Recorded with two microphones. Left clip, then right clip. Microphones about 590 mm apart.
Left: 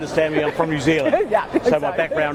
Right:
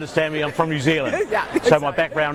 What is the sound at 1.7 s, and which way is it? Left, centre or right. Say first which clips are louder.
Speech: right 5 dB; right.